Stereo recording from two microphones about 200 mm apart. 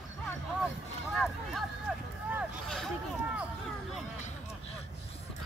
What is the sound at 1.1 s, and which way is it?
Speech, centre (ahead or behind).